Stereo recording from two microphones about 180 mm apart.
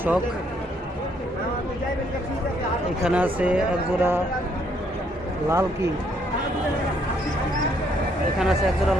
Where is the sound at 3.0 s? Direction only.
10° right (ahead or behind).